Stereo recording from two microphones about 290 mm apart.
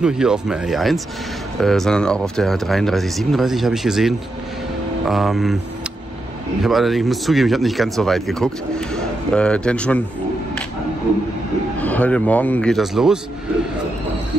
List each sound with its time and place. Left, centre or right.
0.0 s speech: centre
6.6 s speech: centre
11.8 s speech: centre